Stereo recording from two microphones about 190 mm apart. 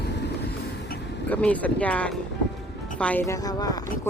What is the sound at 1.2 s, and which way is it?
Speech, 10° left (ahead or behind).